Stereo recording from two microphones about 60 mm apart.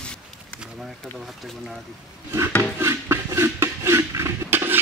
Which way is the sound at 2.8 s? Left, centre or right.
Right.